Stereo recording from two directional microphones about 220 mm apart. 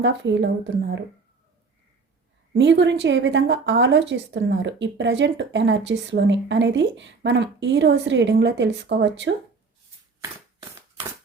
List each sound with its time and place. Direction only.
0.0 s speech: 55° right (ahead or behind)
2.6 s a woman's voice: 55° right (ahead or behind)